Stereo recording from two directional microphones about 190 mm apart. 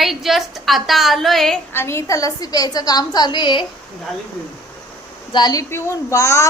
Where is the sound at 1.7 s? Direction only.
15° left (ahead or behind).